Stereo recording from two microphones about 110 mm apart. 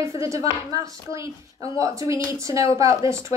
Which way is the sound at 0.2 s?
30° right (ahead or behind).